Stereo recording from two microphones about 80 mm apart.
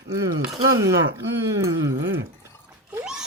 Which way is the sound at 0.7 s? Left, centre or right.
Right.